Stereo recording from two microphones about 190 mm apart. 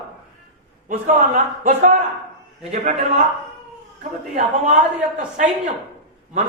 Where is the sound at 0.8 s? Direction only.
40° right (ahead or behind).